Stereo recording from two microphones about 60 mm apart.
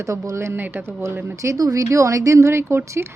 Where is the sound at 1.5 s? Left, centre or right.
Right.